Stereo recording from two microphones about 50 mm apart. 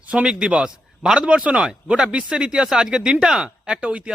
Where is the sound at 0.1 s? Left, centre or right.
Right.